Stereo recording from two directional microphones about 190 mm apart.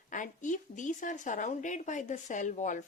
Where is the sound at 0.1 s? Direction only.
40° left (ahead or behind).